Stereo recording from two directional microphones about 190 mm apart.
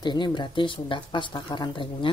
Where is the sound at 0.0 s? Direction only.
25° left (ahead or behind).